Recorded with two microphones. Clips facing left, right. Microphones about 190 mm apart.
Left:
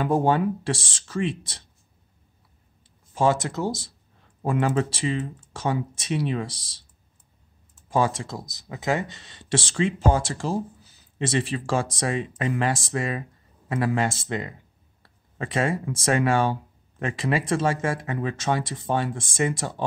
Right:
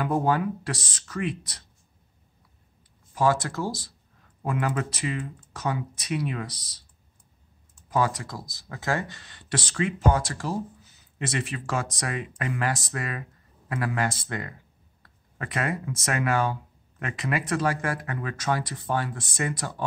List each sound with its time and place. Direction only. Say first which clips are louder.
0.0 s speech: left 3 dB; 25° left (ahead or behind)
3.2 s speech: left 2 dB; 25° left (ahead or behind)
7.9 s speech: left 2 dB; 25° left (ahead or behind)